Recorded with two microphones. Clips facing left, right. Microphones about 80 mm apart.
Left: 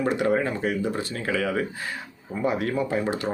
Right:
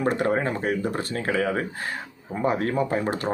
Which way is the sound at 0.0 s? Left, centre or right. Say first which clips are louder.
Even; right.